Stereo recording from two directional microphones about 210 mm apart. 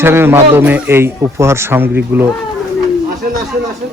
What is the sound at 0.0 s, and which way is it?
Speech, 10° right (ahead or behind).